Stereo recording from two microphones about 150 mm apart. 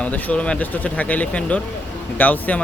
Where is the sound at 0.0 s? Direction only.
10° left (ahead or behind).